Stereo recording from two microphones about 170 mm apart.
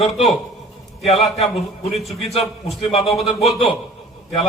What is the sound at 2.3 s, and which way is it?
Speech, 35° left (ahead or behind).